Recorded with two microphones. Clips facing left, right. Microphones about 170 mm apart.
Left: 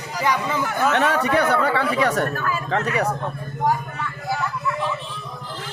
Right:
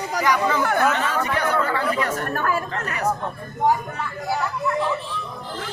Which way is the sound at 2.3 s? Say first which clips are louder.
Right 3 dB; 55° right (ahead or behind).